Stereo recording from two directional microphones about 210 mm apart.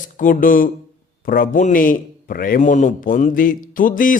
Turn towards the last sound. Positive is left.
turn(degrees=40)  # may be behind; listen again after turning